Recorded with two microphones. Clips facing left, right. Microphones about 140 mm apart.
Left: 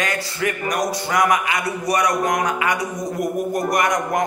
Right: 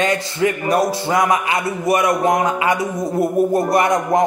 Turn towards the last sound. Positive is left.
turn(degrees=-30)  # may be behind; listen again after turning